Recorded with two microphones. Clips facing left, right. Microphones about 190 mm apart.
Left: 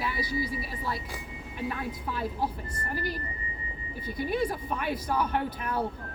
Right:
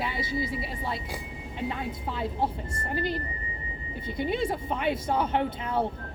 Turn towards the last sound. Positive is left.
turn(degrees=-25)  # may be behind; listen again after turning